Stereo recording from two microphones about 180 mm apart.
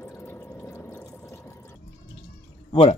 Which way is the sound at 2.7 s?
30° left (ahead or behind).